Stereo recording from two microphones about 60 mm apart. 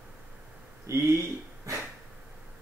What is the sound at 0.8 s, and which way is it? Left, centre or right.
Speech, right.